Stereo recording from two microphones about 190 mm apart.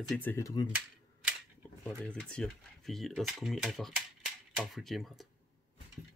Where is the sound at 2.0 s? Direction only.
5° left (ahead or behind).